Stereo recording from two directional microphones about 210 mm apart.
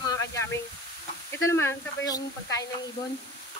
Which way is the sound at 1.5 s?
15° left (ahead or behind).